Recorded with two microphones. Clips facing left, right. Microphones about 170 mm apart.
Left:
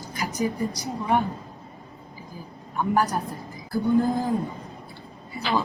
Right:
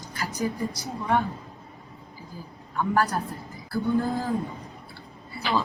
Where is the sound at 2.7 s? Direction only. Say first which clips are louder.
Left 1 dB; 15° left (ahead or behind).